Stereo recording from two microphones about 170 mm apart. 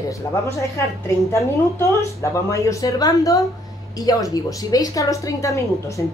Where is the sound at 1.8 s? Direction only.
20° left (ahead or behind).